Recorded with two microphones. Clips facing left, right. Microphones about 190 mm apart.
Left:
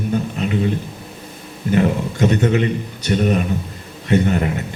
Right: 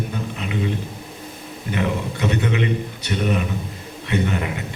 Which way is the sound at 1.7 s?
45° left (ahead or behind).